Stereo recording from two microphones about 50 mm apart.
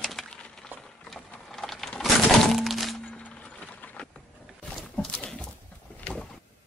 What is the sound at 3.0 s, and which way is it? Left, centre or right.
Music, left.